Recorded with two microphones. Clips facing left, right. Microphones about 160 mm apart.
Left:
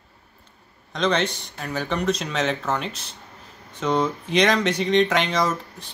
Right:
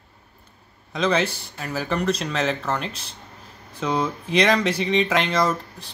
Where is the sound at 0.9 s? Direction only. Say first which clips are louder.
Right 1 dB; 5° right (ahead or behind).